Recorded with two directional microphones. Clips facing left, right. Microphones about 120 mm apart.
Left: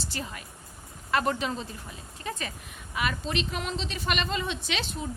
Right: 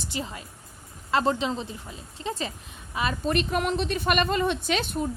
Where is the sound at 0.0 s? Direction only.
20° right (ahead or behind).